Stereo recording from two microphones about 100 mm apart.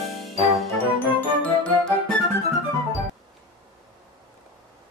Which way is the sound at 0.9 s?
10° left (ahead or behind).